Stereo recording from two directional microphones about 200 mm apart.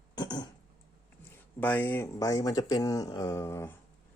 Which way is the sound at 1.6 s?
10° left (ahead or behind).